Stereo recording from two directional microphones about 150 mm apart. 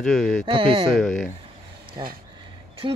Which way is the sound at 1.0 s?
Centre (ahead or behind).